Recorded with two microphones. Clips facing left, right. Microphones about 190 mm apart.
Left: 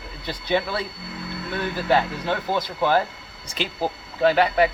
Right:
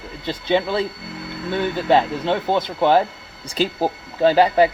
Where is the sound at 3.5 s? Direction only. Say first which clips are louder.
Right 6 dB; 40° right (ahead or behind).